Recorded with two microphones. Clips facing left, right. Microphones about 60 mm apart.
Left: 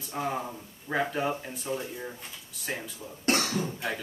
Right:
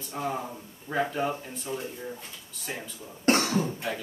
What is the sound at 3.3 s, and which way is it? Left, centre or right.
Cough, right.